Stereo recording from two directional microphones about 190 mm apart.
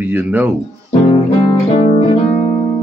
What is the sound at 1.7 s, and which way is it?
Guitar, 35° left (ahead or behind).